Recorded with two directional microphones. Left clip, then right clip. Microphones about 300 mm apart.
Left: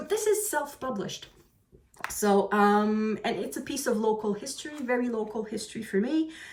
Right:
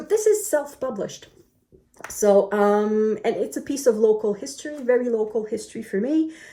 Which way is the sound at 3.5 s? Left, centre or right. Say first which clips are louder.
Right 9 dB; centre.